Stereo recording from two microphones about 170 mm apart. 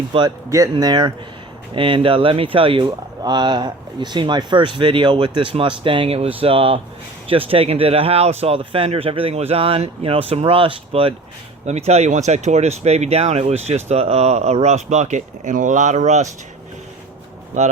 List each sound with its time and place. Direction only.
0.1 s speech: 25° right (ahead or behind); by 16.3 s 45° right (ahead or behind)